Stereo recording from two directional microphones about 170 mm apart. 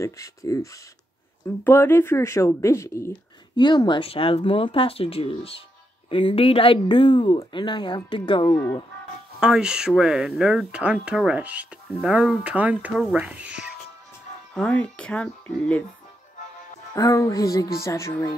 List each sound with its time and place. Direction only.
0.0 s speech: 20° left (ahead or behind)
9.4 s speech: 5° right (ahead or behind)
14.5 s speech: 5° left (ahead or behind)
16.9 s speech: 20° left (ahead or behind)